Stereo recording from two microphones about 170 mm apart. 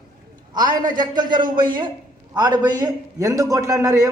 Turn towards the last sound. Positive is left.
turn(degrees=-20)  # may be behind; listen again after turning